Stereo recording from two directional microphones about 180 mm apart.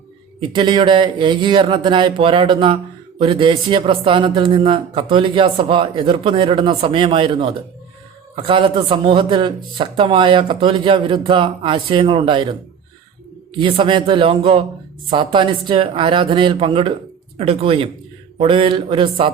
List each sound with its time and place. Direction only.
0.3 s a man's voice: 25° right (ahead or behind)
13.6 s a man's voice: 30° right (ahead or behind)